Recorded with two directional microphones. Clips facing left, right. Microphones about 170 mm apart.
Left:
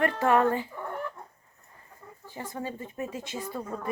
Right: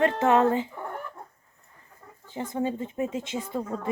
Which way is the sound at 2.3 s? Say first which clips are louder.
Right 7 dB; 20° right (ahead or behind).